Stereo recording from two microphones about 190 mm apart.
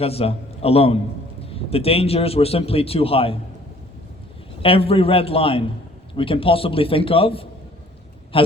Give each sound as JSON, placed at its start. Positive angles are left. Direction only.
{"t": 0.0, "sound": "a man's voice", "side_deg": 30}
{"t": 4.6, "sound": "a man's voice", "side_deg": 30}